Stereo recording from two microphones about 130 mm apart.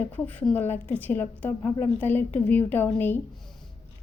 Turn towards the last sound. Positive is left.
turn(degrees=15)  # may be behind; listen again after turning